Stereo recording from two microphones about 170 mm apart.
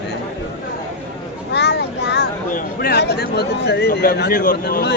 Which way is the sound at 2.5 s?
65° left (ahead or behind).